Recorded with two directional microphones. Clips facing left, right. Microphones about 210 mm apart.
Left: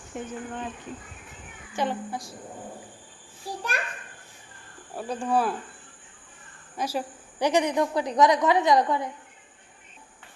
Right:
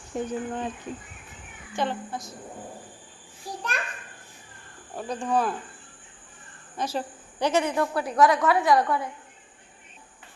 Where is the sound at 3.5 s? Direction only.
30° left (ahead or behind).